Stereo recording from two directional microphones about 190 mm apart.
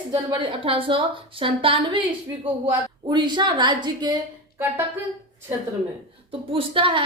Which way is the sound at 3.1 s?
25° right (ahead or behind).